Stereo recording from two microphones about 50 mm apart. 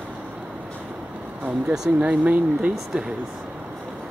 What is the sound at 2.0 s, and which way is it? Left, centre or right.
Speech, right.